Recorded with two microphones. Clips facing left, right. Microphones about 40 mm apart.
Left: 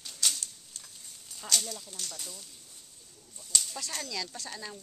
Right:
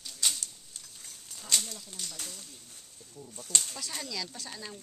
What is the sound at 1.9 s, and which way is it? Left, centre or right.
Speech, centre.